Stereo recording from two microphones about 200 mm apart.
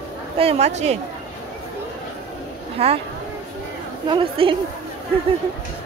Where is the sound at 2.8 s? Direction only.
30° right (ahead or behind).